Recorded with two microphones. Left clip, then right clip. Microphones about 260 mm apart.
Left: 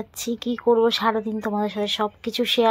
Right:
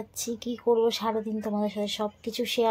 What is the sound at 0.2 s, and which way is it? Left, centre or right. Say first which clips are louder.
Speech: left 6 dB; centre.